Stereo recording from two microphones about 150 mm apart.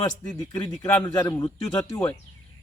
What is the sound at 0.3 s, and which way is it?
Speech, 30° left (ahead or behind).